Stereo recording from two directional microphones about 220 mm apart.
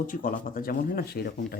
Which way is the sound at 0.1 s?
40° left (ahead or behind).